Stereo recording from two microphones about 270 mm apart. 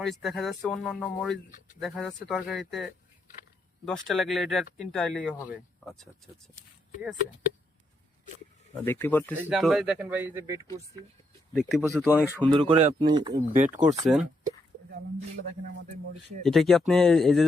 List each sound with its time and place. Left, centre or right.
0.0 s speech: centre
8.7 s speech: centre
12.4 s speech: centre
13.3 s speech: right
13.8 s speech: centre
16.4 s speech: centre